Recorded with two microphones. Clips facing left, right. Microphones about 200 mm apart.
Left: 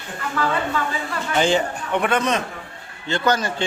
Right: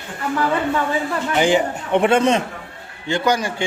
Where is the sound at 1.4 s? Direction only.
15° right (ahead or behind).